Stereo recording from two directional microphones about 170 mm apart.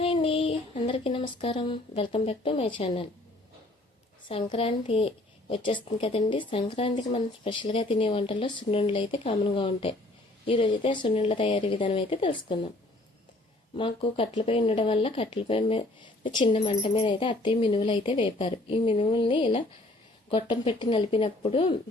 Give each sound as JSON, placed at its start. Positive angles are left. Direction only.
{"t": 0.0, "sound": "child singing", "side_deg": 35}
{"t": 1.9, "sound": "a woman's voice", "side_deg": 35}
{"t": 4.3, "sound": "a woman's voice", "side_deg": 30}
{"t": 13.7, "sound": "a woman's voice", "side_deg": 30}